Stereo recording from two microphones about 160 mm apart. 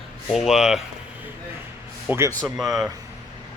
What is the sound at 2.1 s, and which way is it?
Speech, 15° right (ahead or behind).